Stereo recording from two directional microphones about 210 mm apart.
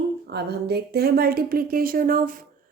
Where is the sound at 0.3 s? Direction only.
50° right (ahead or behind).